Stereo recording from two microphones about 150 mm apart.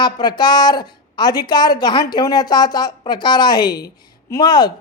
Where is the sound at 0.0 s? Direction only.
30° left (ahead or behind).